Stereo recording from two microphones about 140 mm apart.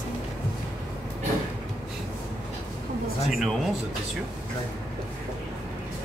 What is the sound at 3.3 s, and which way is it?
Speech, centre (ahead or behind).